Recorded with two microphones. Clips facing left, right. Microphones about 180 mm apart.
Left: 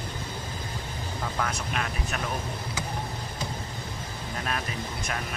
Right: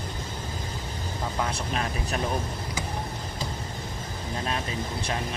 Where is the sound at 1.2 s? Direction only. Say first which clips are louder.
Right 1 dB; 25° right (ahead or behind).